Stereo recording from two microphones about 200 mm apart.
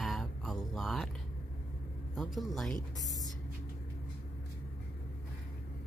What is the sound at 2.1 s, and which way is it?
Speech, centre (ahead or behind).